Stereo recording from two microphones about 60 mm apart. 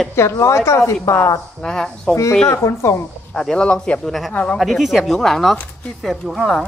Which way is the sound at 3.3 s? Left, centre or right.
Centre.